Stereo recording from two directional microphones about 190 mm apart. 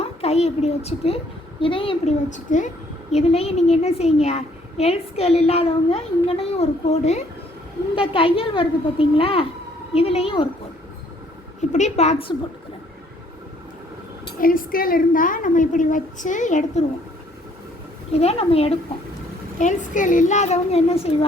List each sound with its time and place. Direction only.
0.0 s a woman's voice: 35° left (ahead or behind)
11.7 s a child's voice: 35° left (ahead or behind)
14.3 s a woman's voice: 45° left (ahead or behind)
18.1 s a child's voice: 30° left (ahead or behind)
19.5 s a child's voice: 40° left (ahead or behind)